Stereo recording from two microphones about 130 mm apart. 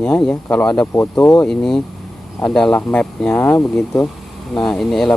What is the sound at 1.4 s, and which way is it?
Speech, 5° left (ahead or behind).